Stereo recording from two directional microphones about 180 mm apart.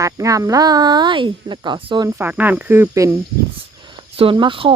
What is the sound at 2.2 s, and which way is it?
Speech, 10° right (ahead or behind).